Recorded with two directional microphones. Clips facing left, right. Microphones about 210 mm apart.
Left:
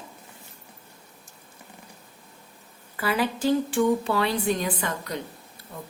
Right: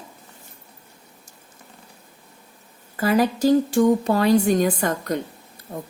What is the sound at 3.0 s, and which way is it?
A woman's voice, 45° right (ahead or behind).